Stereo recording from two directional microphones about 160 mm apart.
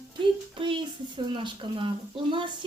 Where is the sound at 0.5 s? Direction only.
30° right (ahead or behind).